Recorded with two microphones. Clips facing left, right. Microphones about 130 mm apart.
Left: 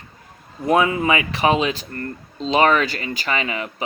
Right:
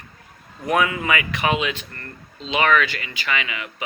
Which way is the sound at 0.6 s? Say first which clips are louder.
Left 4 dB; 30° left (ahead or behind).